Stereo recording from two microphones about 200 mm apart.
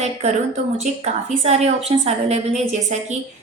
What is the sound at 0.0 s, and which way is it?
A woman's voice, 35° right (ahead or behind).